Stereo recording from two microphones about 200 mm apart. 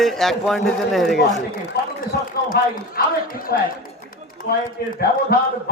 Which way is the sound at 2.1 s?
45° left (ahead or behind).